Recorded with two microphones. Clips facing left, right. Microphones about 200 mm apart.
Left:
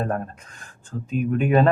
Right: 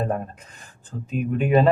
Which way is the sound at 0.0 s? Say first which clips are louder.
Even; 5° right (ahead or behind).